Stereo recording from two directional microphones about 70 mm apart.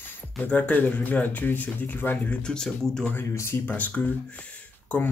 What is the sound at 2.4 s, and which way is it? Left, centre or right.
Speech, centre.